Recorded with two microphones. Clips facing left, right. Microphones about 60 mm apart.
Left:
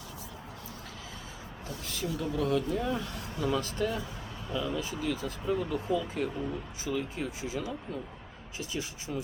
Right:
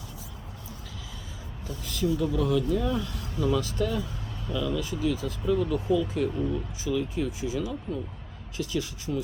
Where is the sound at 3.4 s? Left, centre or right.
Left.